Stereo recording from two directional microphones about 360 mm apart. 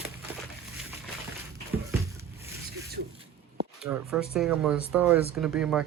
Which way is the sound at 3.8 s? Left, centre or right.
Centre.